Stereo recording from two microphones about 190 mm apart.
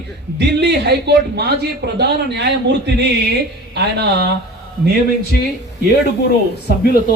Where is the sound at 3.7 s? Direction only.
60° right (ahead or behind).